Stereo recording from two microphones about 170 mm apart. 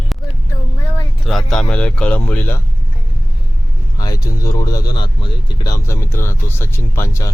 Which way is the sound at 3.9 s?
20° left (ahead or behind).